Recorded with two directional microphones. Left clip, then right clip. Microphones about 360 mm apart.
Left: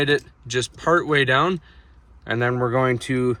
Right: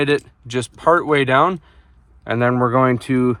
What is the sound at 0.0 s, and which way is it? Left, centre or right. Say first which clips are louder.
Speech: right 2 dB; centre.